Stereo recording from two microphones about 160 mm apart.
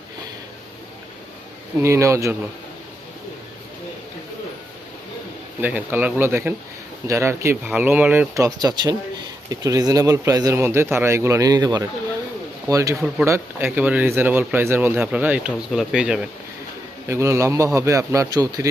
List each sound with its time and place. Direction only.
1.8 s a man's voice: 20° right (ahead or behind)
5.5 s speech: 10° right (ahead or behind)
8.4 s a man's voice: 25° right (ahead or behind); by 16.2 s 5° right (ahead or behind)
17.1 s a man's voice: 20° right (ahead or behind)